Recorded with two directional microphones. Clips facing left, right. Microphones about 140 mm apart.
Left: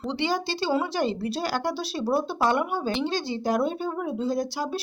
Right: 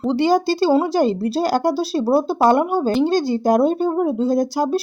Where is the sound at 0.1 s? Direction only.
40° right (ahead or behind).